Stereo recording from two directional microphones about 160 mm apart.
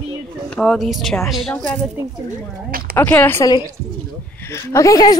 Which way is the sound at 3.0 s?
15° left (ahead or behind).